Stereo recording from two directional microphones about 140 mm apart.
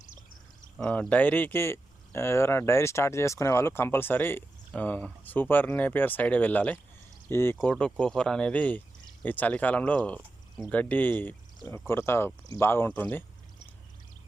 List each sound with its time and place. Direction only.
0.8 s speech: 10° left (ahead or behind)